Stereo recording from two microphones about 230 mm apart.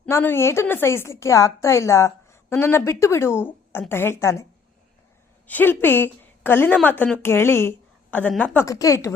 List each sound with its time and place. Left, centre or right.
0.0 s a woman's voice: centre
5.5 s a woman's voice: centre